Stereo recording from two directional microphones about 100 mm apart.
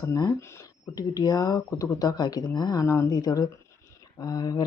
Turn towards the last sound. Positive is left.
turn(degrees=40)  # may be behind; listen again after turning